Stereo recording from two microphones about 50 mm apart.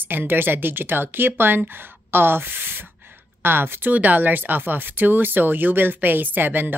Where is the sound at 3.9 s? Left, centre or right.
Right.